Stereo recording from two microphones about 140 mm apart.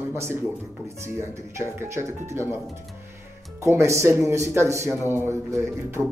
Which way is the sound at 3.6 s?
20° right (ahead or behind).